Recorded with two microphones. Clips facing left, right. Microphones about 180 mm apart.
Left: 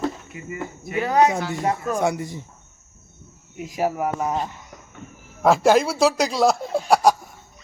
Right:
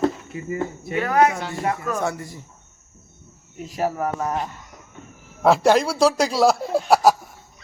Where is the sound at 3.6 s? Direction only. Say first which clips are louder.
Left 1 dB; 15° left (ahead or behind).